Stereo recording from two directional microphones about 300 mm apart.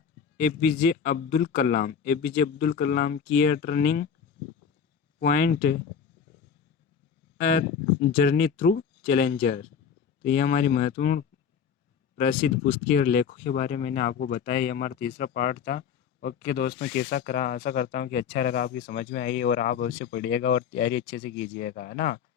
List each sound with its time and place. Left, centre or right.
0.3 s speech: left
5.2 s speech: left
7.3 s speech: left